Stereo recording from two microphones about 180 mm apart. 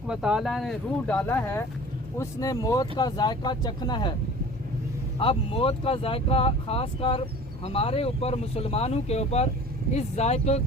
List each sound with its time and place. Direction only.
0.1 s speech: 5° right (ahead or behind); by 4.1 s 25° left (ahead or behind)
5.2 s speech: 30° left (ahead or behind)